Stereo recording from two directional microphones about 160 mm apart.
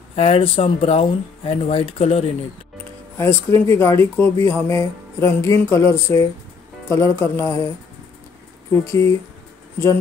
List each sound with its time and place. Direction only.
0.1 s speech: 40° left (ahead or behind)
3.4 s speech: 15° left (ahead or behind)
8.8 s speech: 20° left (ahead or behind)